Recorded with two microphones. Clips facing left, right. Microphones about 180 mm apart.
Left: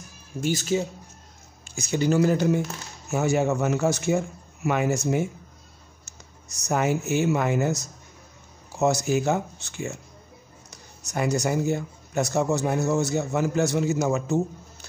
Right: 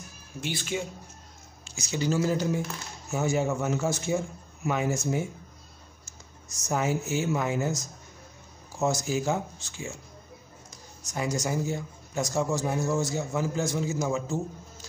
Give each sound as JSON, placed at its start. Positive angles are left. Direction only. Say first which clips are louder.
{"t": 0.4, "sound": "speech", "louder": "left 7 dB", "side_deg": 45}
{"t": 1.6, "sound": "a man's voice", "louder": "left 5 dB", "side_deg": 55}